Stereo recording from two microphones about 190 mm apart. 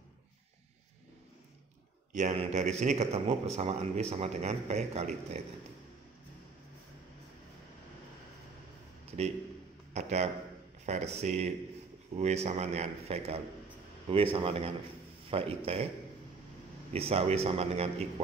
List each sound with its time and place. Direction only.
2.1 s a man's voice: 40° right (ahead or behind)
9.9 s a man's voice: 35° right (ahead or behind)
16.9 s a man's voice: 30° right (ahead or behind)